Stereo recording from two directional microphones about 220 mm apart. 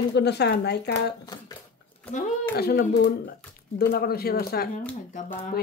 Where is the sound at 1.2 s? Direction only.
20° left (ahead or behind).